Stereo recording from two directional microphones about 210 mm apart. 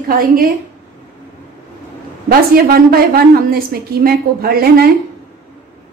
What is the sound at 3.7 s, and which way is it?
A woman's voice, 45° right (ahead or behind).